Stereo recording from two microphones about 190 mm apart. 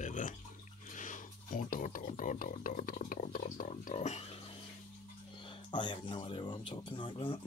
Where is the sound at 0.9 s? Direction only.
40° left (ahead or behind).